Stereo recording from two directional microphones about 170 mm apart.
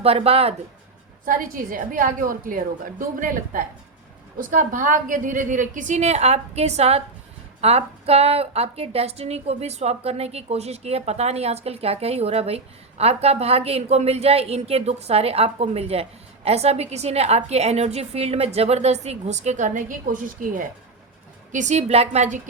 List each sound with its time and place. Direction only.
0.0 s a woman's voice: 35° right (ahead or behind)
1.2 s a woman's voice: 50° right (ahead or behind)